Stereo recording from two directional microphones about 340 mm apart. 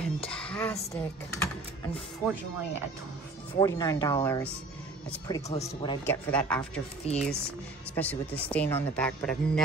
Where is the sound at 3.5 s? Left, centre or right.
Centre.